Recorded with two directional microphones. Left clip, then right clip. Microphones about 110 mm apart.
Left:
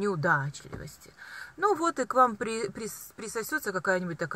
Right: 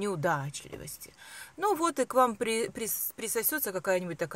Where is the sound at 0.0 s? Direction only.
10° right (ahead or behind).